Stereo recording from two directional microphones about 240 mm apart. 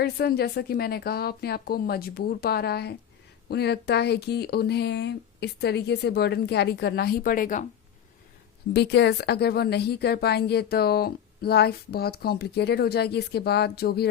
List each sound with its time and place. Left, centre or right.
0.0 s speech: left
8.7 s speech: left